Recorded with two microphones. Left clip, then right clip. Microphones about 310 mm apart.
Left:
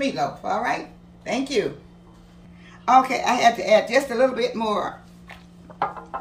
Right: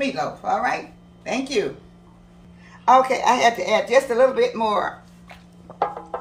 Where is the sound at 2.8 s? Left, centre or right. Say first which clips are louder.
Right 2 dB; centre.